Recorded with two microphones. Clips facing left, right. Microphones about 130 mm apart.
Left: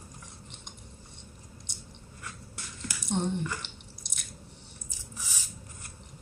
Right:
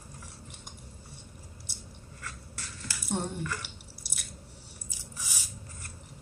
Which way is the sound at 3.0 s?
5° right (ahead or behind).